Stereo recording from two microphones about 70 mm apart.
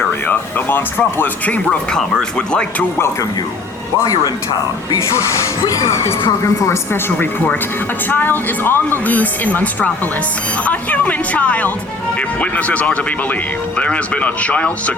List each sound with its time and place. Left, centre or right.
0.3 s speech: left
4.0 s speech: left
5.9 s a woman's voice: left
8.1 s speech: left